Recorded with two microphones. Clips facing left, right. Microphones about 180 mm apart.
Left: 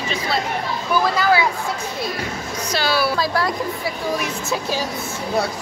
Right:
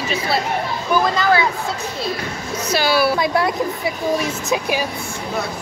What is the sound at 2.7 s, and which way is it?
Speech, 10° right (ahead or behind).